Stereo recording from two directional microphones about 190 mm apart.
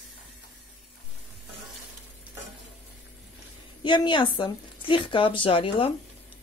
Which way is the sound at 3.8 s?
25° left (ahead or behind).